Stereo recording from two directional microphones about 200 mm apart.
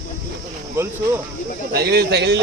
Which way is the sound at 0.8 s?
10° right (ahead or behind).